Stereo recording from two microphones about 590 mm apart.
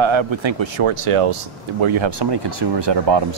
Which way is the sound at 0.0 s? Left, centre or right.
Right.